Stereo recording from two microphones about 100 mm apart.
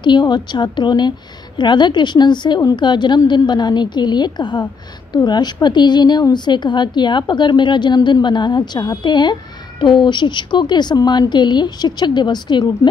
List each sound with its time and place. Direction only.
0.0 s a woman's voice: 50° left (ahead or behind)